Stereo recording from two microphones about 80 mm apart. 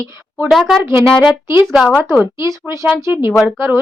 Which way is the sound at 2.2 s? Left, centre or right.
Right.